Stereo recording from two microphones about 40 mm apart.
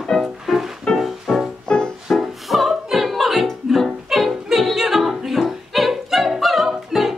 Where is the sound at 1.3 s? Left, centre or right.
Centre.